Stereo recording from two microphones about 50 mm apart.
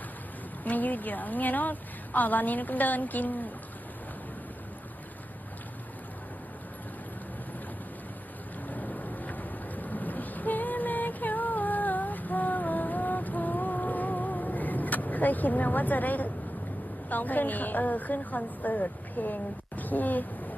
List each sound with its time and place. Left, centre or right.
0.6 s a woman's voice: left
8.7 s train: left
17.1 s a woman's voice: left